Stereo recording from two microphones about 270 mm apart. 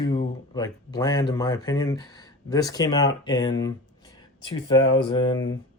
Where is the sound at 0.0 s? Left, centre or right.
Left.